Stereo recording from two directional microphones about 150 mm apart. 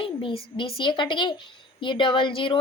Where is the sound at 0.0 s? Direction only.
35° left (ahead or behind).